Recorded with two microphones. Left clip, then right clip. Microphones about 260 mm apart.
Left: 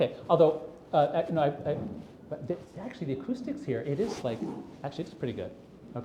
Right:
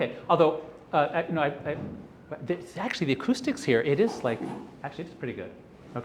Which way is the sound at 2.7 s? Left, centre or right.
Right.